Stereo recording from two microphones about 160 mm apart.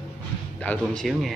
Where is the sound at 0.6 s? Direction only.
5° left (ahead or behind).